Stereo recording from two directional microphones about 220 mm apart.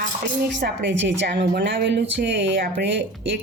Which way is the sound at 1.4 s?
40° right (ahead or behind).